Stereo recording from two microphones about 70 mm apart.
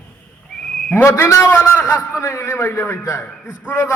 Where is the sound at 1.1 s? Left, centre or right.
Left.